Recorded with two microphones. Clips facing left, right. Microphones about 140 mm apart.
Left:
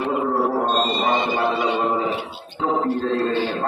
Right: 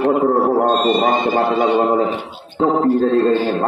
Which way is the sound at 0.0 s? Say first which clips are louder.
Right 6 dB; 50° right (ahead or behind).